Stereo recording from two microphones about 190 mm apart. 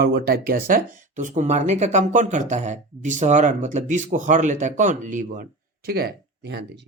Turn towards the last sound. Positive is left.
turn(degrees=-65)  # may be behind; listen again after turning